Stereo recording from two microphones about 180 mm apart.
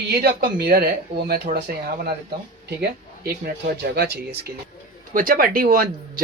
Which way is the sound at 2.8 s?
60° right (ahead or behind).